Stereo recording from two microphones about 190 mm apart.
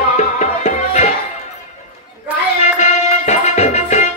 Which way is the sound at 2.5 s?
35° left (ahead or behind).